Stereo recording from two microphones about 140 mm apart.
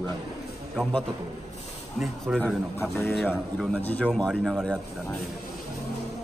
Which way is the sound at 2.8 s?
15° left (ahead or behind).